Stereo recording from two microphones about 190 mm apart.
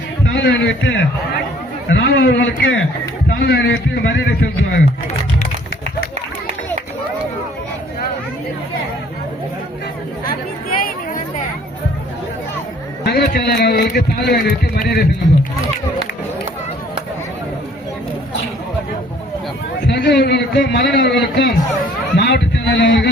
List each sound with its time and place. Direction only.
0.3 s a man's voice: 70° left (ahead or behind)
1.9 s a man's voice: 65° left (ahead or behind)
3.2 s a man's voice: 60° left (ahead or behind)
10.2 s a sound: 50° left (ahead or behind)
13.1 s a man's voice: 55° left (ahead or behind)
19.9 s a man's voice: 65° left (ahead or behind)